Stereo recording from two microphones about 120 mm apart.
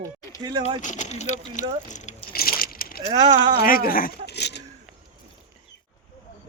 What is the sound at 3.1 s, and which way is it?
Speech, 35° right (ahead or behind).